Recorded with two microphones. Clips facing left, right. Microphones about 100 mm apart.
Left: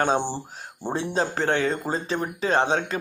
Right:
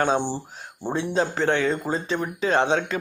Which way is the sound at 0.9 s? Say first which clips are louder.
Right 2 dB; 35° left (ahead or behind).